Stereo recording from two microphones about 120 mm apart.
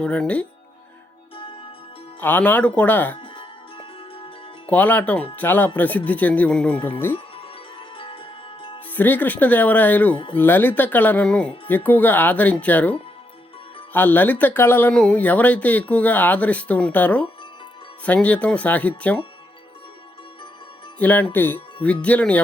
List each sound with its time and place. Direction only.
0.0 s speech: 10° left (ahead or behind)
2.2 s speech: 15° left (ahead or behind)
3.2 s music: 50° left (ahead or behind)
4.7 s speech: 15° left (ahead or behind)
7.3 s music: 50° left (ahead or behind)
8.9 s speech: 15° left (ahead or behind)
21.0 s speech: 15° left (ahead or behind)